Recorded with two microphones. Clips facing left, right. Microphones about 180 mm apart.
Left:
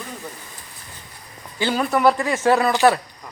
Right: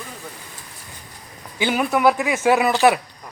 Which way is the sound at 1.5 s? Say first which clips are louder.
Even; 15° right (ahead or behind).